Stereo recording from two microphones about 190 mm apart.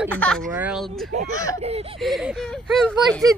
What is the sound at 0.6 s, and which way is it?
Speech, 5° right (ahead or behind).